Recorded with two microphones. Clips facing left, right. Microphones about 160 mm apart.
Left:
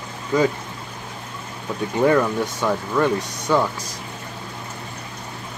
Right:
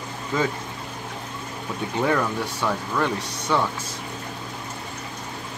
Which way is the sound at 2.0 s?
10° left (ahead or behind).